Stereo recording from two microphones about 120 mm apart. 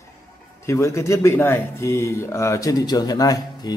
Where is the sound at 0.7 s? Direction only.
25° left (ahead or behind).